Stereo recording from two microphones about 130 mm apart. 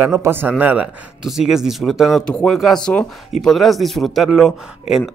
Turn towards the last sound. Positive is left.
turn(degrees=-5)  # may be behind; listen again after turning